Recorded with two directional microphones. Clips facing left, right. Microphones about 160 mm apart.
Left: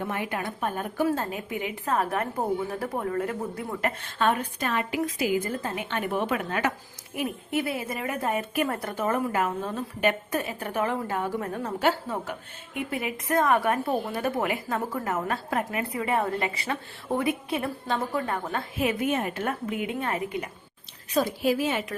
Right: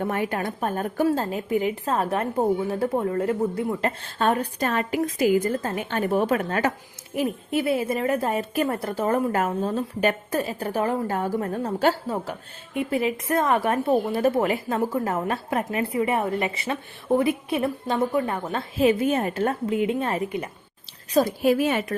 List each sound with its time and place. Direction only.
0.0 s a woman's voice: 45° right (ahead or behind)
1.0 s a woman's voice: 30° right (ahead or behind)
7.2 s a woman's voice: 30° right (ahead or behind)
21.1 s a woman's voice: 45° right (ahead or behind)